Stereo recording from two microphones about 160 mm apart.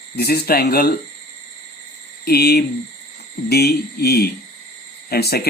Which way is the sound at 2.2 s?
80° left.